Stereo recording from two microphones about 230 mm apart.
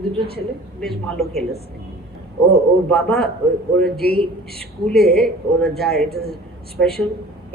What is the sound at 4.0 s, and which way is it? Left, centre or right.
Speech, left.